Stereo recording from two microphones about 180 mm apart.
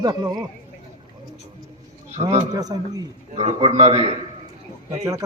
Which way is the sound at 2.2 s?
35° right (ahead or behind).